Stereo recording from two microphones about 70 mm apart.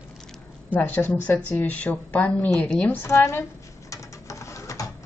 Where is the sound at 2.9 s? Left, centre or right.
Left.